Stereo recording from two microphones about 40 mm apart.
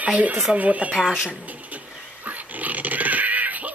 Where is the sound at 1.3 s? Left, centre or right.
Right.